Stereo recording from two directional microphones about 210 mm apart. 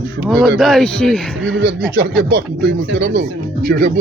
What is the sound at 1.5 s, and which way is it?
Speech, 50° right (ahead or behind).